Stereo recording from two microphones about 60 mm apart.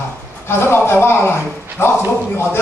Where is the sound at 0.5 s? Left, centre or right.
Left.